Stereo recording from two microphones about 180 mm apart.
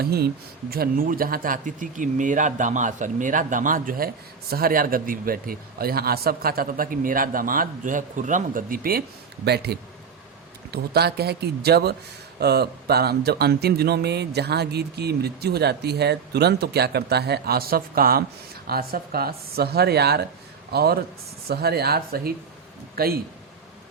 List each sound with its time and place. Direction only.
0.0 s speech: 60° right (ahead or behind)